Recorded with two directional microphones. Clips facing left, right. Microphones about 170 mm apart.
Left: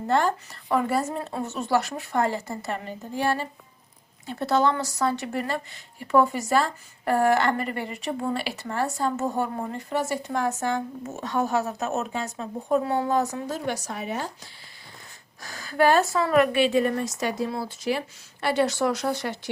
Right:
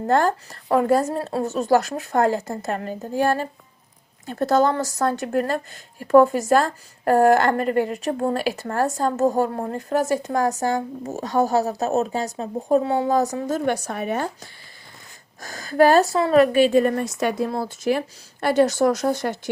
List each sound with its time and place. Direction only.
0.1 s speech: 45° right (ahead or behind)
13.7 s a woman's voice: 55° right (ahead or behind)
15.4 s speech: 45° right (ahead or behind)